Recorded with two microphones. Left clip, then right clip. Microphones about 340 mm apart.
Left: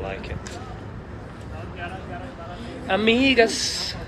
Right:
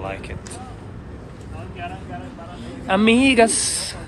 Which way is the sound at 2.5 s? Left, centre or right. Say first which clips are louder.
Right 3 dB; centre.